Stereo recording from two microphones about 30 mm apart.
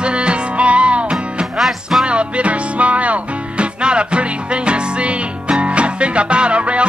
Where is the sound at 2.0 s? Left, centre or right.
Right.